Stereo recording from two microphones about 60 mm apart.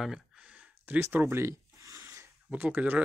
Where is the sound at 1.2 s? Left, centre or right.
Right.